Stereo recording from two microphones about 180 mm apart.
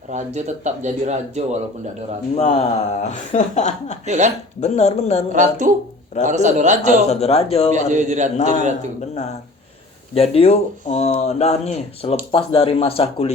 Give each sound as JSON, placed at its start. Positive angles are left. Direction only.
{"t": 0.1, "sound": "speech", "side_deg": -40}
{"t": 2.3, "sound": "speech", "side_deg": 35}
{"t": 4.0, "sound": "speech", "side_deg": -40}
{"t": 4.6, "sound": "speech", "side_deg": 40}
{"t": 5.3, "sound": "speech", "side_deg": -45}
{"t": 7.1, "sound": "speech", "side_deg": 35}
{"t": 7.7, "sound": "speech", "side_deg": -40}
{"t": 10.2, "sound": "speech", "side_deg": 35}